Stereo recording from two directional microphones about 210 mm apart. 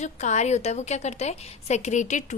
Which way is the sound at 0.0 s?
35° left (ahead or behind).